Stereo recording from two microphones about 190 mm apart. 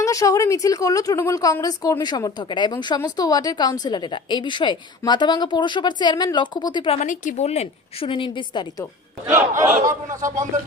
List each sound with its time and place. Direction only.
0.0 s a woman's voice: 15° left (ahead or behind)
7.0 s a woman's voice: 40° left (ahead or behind); by 8.6 s 25° left (ahead or behind)
9.3 s speech: 40° right (ahead or behind)